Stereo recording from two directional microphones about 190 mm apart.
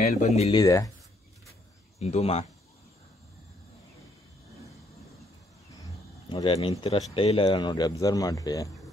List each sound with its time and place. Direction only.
0.0 s speech: 40° left (ahead or behind)
0.5 s speech: 20° left (ahead or behind)
2.0 s speech: 35° left (ahead or behind)
6.2 s speech: 25° left (ahead or behind)